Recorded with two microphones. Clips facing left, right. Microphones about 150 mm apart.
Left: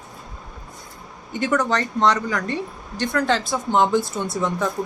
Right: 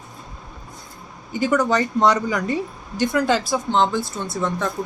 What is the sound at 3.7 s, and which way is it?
Speech, 15° left (ahead or behind).